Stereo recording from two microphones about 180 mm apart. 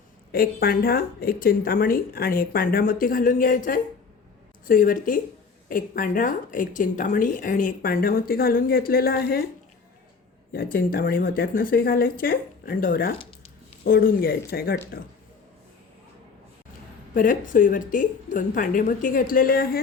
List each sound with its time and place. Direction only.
0.3 s speech: 55° left (ahead or behind)
10.5 s speech: 55° left (ahead or behind)
17.2 s speech: 50° left (ahead or behind)